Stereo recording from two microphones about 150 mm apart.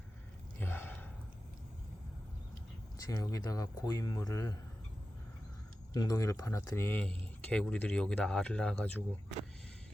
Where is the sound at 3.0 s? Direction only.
20° left (ahead or behind).